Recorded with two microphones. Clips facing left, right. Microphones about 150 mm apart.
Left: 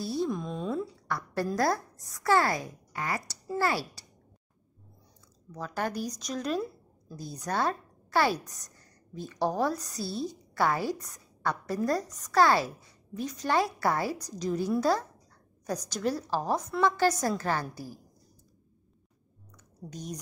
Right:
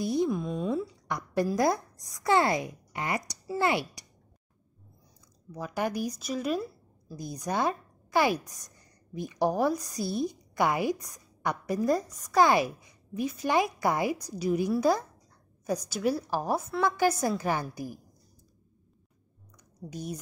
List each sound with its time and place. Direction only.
0.0 s speech: 15° right (ahead or behind)
0.3 s a sound: 5° right (ahead or behind)
1.0 s a woman's voice: 15° right (ahead or behind)
5.5 s a woman's voice: 10° right (ahead or behind)
19.9 s a woman's voice: 10° right (ahead or behind)